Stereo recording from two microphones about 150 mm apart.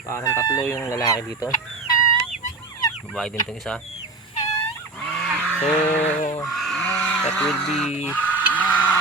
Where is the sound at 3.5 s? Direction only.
5° left (ahead or behind).